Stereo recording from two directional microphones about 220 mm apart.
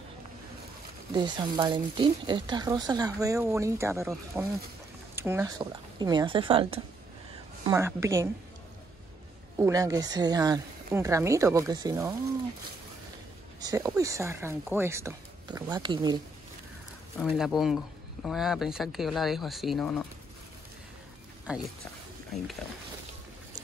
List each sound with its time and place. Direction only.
1.1 s speech: 20° right (ahead or behind)
7.6 s speech: 10° right (ahead or behind)
9.6 s speech: 15° right (ahead or behind)
13.6 s speech: 15° right (ahead or behind)
17.2 s speech: centre (ahead or behind)
21.5 s speech: 5° right (ahead or behind)